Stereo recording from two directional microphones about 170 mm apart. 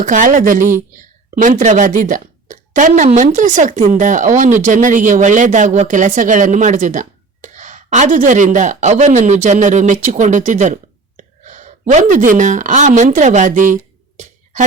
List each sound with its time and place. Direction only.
0.0 s a woman's voice: 50° right (ahead or behind)